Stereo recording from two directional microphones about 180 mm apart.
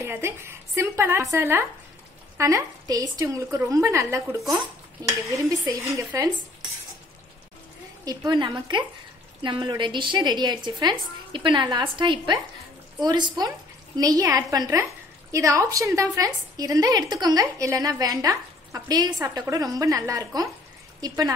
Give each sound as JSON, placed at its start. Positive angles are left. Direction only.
{"t": 0.0, "sound": "a woman's voice", "side_deg": -15}
{"t": 8.0, "sound": "a woman's voice", "side_deg": -20}